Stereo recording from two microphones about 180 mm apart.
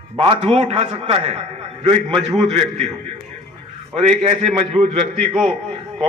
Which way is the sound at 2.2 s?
Centre (ahead or behind).